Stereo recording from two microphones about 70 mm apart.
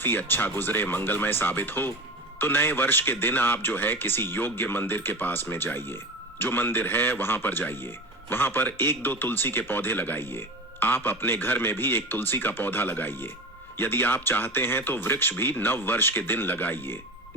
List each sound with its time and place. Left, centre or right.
0.0 s a man's voice: left